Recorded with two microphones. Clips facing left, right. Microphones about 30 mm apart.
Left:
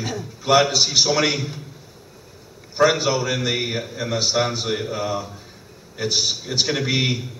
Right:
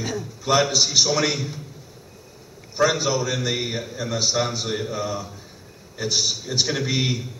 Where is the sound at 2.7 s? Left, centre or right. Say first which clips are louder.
Left 3 dB; centre.